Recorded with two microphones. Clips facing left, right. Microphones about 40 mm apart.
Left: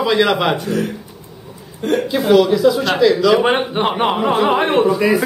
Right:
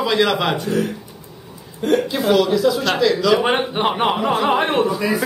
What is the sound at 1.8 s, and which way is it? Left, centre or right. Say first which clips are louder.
A man's voice: left 2 dB; centre.